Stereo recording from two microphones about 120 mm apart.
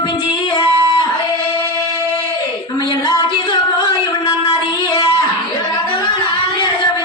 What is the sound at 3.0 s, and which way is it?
Music, 40° left (ahead or behind).